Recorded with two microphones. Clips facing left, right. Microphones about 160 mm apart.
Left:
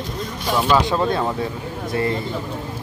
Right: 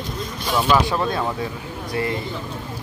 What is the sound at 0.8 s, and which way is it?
Speech, 20° left (ahead or behind).